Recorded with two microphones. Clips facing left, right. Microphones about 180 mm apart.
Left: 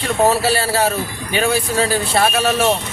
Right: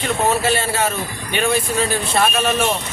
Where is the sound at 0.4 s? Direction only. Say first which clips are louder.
Left 2 dB; 35° left (ahead or behind).